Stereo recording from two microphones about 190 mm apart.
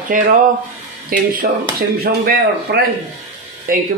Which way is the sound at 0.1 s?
45° right (ahead or behind).